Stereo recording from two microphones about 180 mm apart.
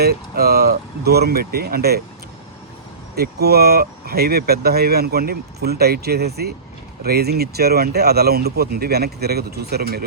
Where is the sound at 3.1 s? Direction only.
60° right (ahead or behind).